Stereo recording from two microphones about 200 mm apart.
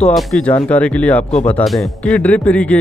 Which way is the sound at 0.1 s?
5° left (ahead or behind).